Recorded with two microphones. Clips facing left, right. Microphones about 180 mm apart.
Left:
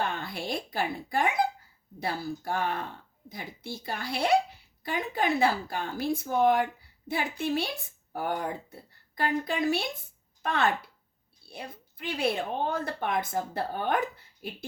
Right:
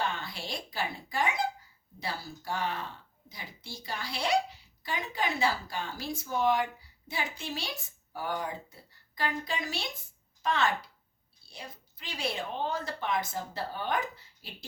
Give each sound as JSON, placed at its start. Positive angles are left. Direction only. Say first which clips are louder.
{"t": 0.0, "sound": "speech", "louder": "left 3 dB", "side_deg": 55}